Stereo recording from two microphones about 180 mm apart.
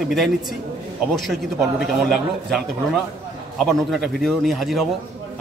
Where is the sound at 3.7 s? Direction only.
Centre (ahead or behind).